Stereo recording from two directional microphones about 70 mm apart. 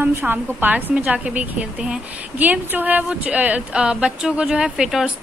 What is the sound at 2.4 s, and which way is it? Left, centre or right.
A woman's voice, right.